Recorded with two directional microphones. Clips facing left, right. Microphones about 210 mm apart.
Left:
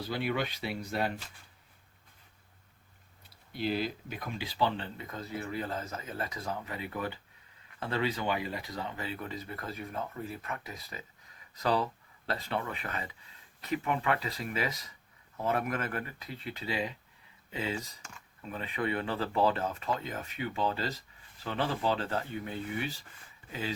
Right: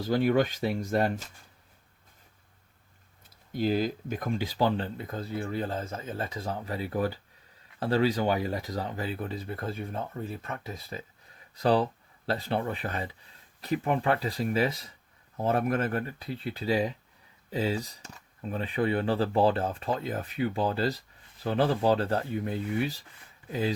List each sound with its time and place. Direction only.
0.0 s speech: 45° right (ahead or behind)
3.2 s speech: 45° right (ahead or behind)